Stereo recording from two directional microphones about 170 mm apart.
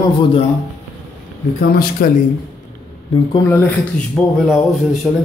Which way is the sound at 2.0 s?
55° left (ahead or behind).